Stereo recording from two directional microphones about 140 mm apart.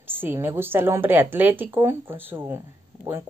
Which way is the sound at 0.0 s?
15° right (ahead or behind).